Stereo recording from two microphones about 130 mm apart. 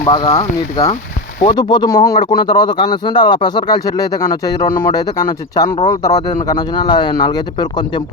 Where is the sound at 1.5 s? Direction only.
35° left (ahead or behind).